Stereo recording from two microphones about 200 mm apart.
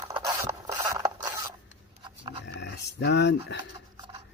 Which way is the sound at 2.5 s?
60° left (ahead or behind).